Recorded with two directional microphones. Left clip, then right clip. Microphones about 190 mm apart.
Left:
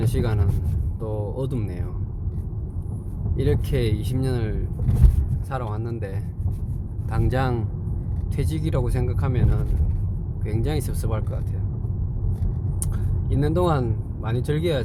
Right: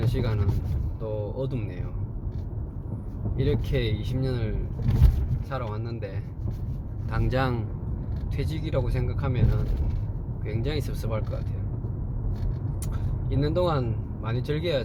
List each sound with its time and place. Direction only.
0.0 s speech: 40° left (ahead or behind)
3.3 s speech: 40° left (ahead or behind)
7.1 s speech: 25° left (ahead or behind)
8.4 s speech: 35° left (ahead or behind)
10.4 s speech: 35° left (ahead or behind)
13.3 s speech: 40° left (ahead or behind)